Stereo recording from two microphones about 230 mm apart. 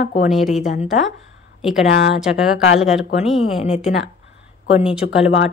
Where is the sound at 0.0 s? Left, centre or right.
Left.